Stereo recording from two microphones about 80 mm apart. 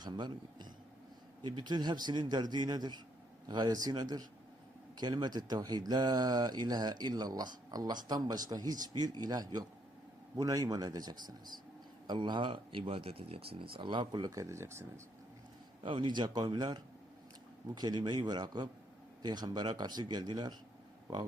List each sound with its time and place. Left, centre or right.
0.0 s speech: right
12.0 s a man's voice: right
15.8 s speech: right